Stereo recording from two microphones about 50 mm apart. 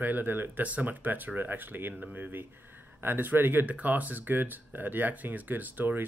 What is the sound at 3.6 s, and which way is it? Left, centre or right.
Speech, right.